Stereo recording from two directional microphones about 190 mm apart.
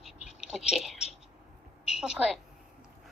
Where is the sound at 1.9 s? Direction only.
5° right (ahead or behind).